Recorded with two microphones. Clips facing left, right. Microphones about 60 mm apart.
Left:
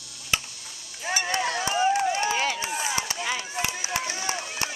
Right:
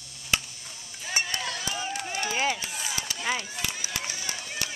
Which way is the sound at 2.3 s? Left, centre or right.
Centre.